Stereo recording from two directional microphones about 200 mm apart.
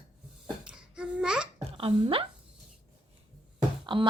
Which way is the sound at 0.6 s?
5° right (ahead or behind).